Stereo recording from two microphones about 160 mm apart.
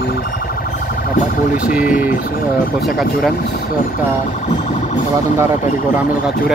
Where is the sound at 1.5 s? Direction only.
10° right (ahead or behind).